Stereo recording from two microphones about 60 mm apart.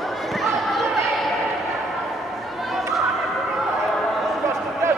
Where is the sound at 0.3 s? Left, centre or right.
Centre.